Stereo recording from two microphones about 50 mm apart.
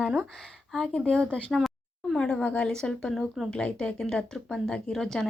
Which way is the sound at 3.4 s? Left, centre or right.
Centre.